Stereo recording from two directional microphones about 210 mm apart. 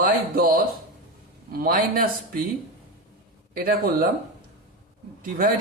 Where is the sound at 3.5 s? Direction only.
45° right (ahead or behind).